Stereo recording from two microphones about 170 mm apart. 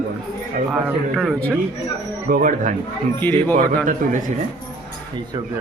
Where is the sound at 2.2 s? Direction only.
55° right (ahead or behind).